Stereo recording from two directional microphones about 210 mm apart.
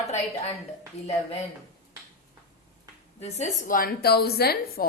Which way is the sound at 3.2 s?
30° left (ahead or behind).